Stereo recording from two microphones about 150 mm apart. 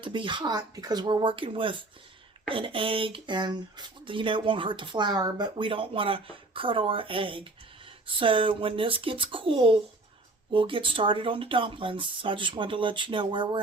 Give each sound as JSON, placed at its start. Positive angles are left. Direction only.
{"t": 0.0, "sound": "speech", "side_deg": -35}